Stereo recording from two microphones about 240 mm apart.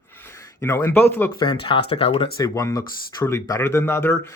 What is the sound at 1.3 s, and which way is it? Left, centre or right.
Speech, left.